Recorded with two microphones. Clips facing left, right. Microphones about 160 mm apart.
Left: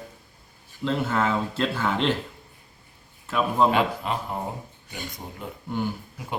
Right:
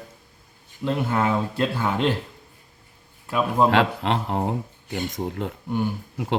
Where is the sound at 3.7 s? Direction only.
85° right.